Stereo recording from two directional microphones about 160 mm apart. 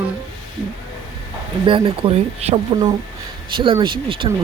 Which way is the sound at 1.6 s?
35° right (ahead or behind).